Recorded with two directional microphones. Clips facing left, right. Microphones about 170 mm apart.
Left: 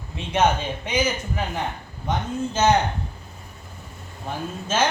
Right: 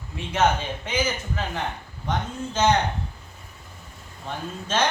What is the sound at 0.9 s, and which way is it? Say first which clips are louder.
Speech: left 3 dB; 15° left (ahead or behind).